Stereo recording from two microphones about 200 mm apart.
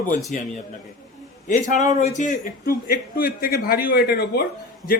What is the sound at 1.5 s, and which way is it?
A man's voice, 35° left (ahead or behind).